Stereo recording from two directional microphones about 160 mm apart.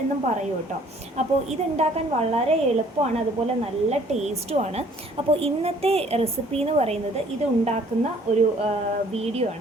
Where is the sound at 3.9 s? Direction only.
45° right (ahead or behind).